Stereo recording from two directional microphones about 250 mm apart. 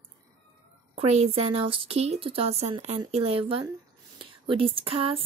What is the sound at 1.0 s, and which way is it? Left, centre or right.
Speech, right.